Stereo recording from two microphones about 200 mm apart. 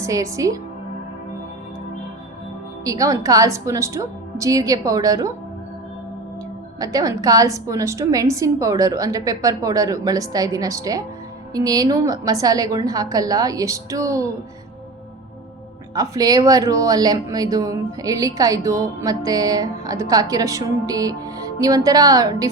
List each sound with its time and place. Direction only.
0.0 s speech: 15° right (ahead or behind)
2.8 s speech: 15° right (ahead or behind)
6.7 s speech: 20° right (ahead or behind)
16.0 s speech: 20° right (ahead or behind)